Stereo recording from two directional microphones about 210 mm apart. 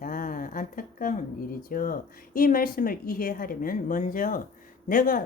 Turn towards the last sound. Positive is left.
turn(degrees=40)  # may be behind; listen again after turning